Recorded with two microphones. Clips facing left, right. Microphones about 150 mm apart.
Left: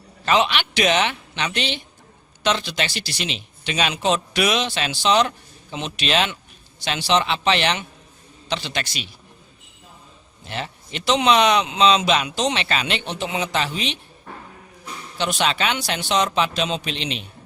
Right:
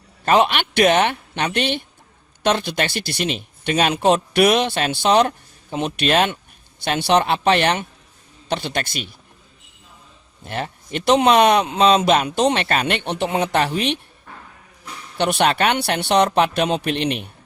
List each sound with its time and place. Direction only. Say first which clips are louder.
0.3 s a man's voice: right 3 dB; 50° right (ahead or behind)
10.4 s a man's voice: right 3 dB; 50° right (ahead or behind)
15.2 s a man's voice: right 5 dB; 60° right (ahead or behind)